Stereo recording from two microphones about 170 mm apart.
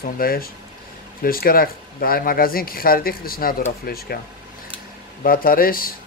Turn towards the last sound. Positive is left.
turn(degrees=60)  # may be behind; listen again after turning